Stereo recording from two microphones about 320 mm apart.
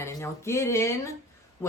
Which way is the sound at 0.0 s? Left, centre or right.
Centre.